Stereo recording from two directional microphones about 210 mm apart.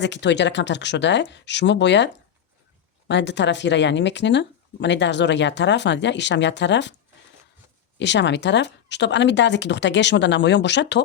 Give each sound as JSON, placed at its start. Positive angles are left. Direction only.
{"t": 0.0, "sound": "speech", "side_deg": 55}
{"t": 3.1, "sound": "speech", "side_deg": 55}
{"t": 7.9, "sound": "speech", "side_deg": 55}